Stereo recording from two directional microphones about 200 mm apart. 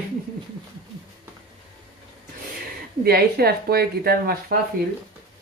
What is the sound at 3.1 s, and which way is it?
Speech, 50° right (ahead or behind).